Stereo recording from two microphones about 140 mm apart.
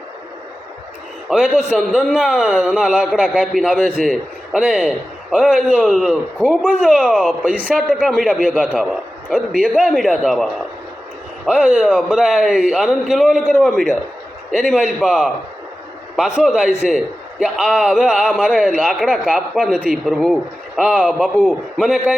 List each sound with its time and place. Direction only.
1.3 s a man's voice: 5° right (ahead or behind)
9.5 s speech: 85° right
9.7 s a man's voice: 5° right (ahead or behind)